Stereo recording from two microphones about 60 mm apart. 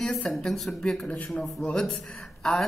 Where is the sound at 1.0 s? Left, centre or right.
Left.